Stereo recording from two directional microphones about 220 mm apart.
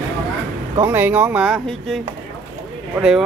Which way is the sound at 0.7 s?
10° right (ahead or behind).